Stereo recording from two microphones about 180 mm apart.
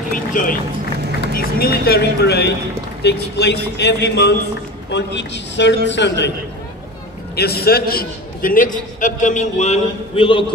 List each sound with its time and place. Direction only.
0.1 s speech: 50° left (ahead or behind); by 6.3 s 75° left (ahead or behind)
7.3 s a man's voice: 60° left (ahead or behind); by 10.4 s 30° left (ahead or behind)